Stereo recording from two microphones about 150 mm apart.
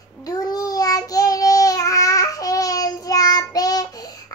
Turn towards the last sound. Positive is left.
turn(degrees=25)  # may be behind; listen again after turning